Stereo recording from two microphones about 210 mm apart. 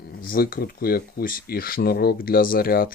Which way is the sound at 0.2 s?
40° left (ahead or behind).